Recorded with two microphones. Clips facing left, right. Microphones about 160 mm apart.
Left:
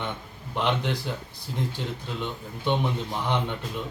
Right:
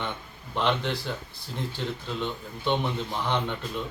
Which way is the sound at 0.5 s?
10° left (ahead or behind).